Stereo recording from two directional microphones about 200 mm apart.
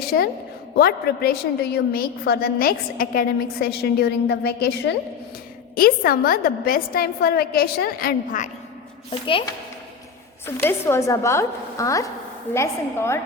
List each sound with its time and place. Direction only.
0.0 s a woman's voice: 50° left (ahead or behind)
5.7 s a woman's voice: 45° left (ahead or behind)
9.0 s a woman's voice: 25° left (ahead or behind)
10.4 s a woman's voice: 10° left (ahead or behind)